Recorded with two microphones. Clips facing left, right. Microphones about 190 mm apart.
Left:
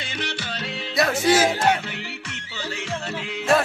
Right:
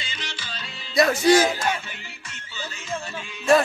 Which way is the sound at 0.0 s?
60° left (ahead or behind).